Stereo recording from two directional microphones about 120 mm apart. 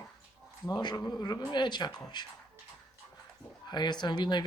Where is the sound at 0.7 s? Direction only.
35° left (ahead or behind).